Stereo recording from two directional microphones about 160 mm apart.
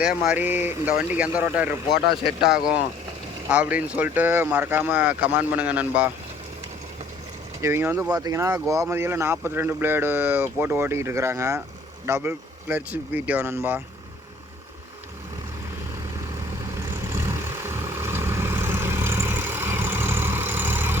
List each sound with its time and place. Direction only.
0.0 s speech: 5° right (ahead or behind)
3.5 s speech: 10° right (ahead or behind)
7.6 s speech: 15° right (ahead or behind)
17.1 s vehicle: 15° right (ahead or behind)